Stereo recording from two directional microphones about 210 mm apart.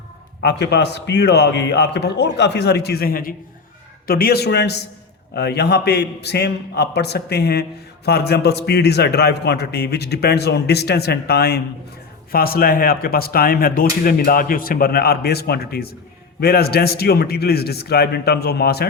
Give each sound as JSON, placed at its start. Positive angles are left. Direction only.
{"t": 0.4, "sound": "a man's voice", "side_deg": 55}